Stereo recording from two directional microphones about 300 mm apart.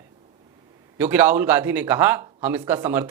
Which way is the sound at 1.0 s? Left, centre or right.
Centre.